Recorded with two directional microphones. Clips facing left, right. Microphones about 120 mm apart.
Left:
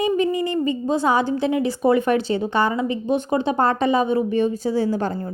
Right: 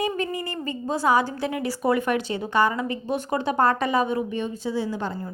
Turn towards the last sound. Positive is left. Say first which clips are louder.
# left 6 dB
turn(degrees=45)  # may be behind; listen again after turning